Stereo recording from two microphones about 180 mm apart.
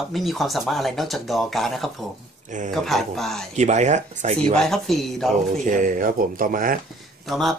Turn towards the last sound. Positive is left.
turn(degrees=0)  # may be behind; listen again after turning